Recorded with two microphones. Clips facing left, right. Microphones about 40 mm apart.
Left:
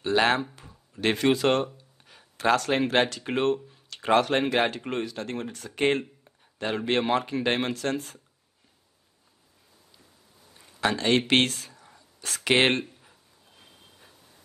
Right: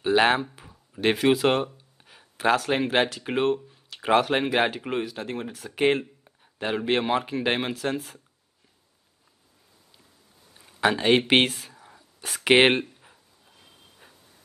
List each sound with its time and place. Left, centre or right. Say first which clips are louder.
0.0 s speech: right 2 dB; centre
10.8 s speech: right 3 dB; centre
14.0 s reversing beeps: right 4 dB; centre